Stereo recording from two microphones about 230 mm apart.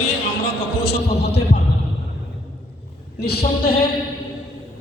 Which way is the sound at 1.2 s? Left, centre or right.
Left.